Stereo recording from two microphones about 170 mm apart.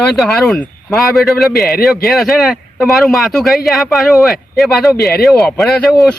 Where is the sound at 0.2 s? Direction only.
5° left (ahead or behind).